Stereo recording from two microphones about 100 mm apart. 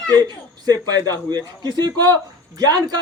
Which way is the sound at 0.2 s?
40° right (ahead or behind).